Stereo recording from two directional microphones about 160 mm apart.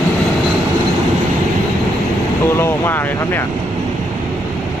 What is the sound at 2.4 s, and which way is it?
Vehicle, 15° left (ahead or behind).